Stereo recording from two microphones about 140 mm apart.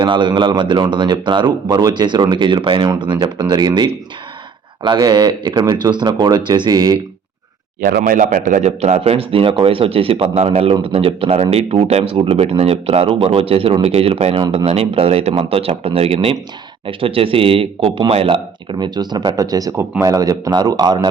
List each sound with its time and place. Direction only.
0.0 s speech: 35° right (ahead or behind)
7.8 s a man's voice: 90° right; by 21.1 s 30° right (ahead or behind)